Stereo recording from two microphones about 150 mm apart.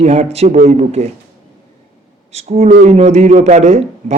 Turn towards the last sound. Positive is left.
turn(degrees=-50)  # may be behind; listen again after turning